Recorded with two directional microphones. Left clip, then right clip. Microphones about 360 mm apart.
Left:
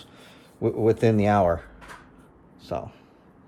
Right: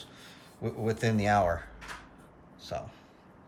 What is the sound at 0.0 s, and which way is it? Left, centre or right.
Speech, centre.